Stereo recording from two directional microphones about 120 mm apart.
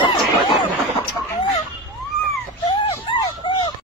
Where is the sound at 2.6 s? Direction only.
45° left (ahead or behind).